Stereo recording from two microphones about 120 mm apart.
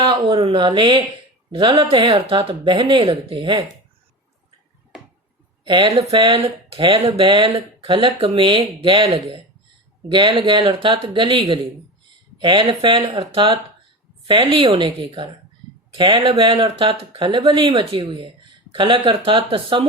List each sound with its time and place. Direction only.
0.0 s a sound: 40° right (ahead or behind)
0.3 s speech: 45° right (ahead or behind)
5.6 s speech: 45° right (ahead or behind)
5.9 s speech: 55° right (ahead or behind)